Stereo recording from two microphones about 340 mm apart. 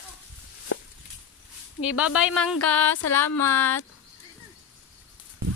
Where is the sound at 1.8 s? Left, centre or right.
Centre.